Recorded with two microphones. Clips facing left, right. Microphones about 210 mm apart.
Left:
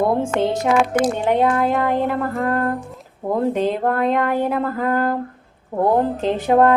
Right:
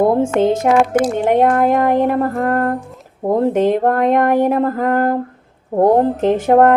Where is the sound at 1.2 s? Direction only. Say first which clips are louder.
Right 4 dB; 50° right (ahead or behind).